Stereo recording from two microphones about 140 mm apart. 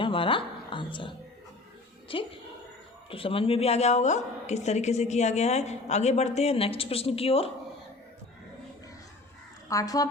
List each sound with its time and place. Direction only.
0.0 s music: 40° left (ahead or behind)
2.0 s a woman's voice: 40° left (ahead or behind)
9.6 s a woman's voice: 25° left (ahead or behind)